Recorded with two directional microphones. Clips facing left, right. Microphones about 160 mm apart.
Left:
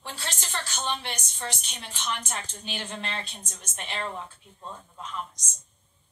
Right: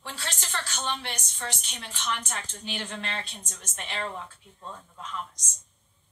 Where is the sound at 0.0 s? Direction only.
25° left (ahead or behind).